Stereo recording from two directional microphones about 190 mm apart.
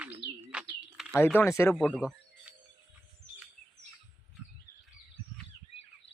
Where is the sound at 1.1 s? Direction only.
10° left (ahead or behind).